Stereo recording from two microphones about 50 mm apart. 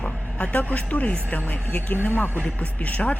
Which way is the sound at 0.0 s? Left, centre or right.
Left.